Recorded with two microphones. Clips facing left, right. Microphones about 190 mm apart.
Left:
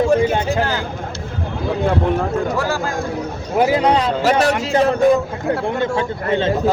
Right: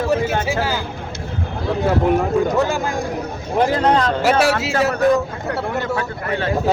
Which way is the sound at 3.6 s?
10° left (ahead or behind).